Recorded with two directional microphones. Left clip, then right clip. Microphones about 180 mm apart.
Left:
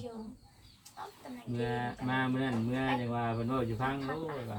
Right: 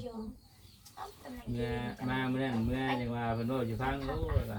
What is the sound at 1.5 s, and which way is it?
Speech, 15° right (ahead or behind).